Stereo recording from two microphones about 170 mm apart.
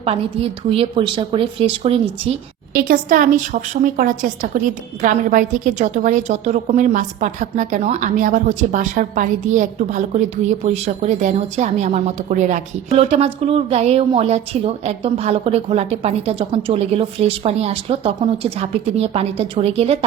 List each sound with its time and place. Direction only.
0.0 s a woman's voice: 35° right (ahead or behind)
2.7 s a woman's voice: 55° right (ahead or behind); by 20.1 s 35° right (ahead or behind)